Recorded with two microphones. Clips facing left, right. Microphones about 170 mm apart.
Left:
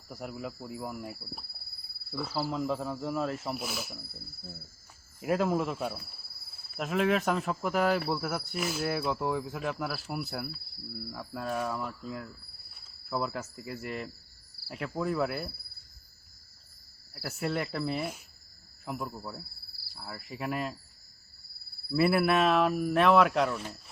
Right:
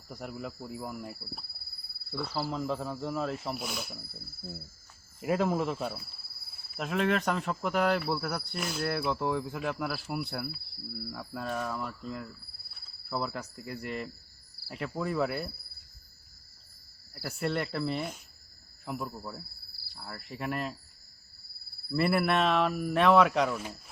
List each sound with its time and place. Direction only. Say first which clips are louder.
0.1 s speech: left 1 dB; centre (ahead or behind)
5.2 s speech: even; centre (ahead or behind)
17.2 s speech: even; centre (ahead or behind)
21.9 s speech: left 2 dB; 5° left (ahead or behind)